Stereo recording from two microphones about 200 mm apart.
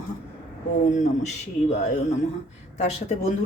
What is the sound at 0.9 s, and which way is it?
Speech, 35° left (ahead or behind).